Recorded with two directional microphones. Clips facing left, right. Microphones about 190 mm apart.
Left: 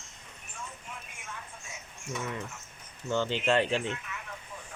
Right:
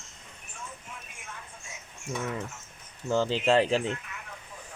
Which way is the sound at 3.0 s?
35° right (ahead or behind).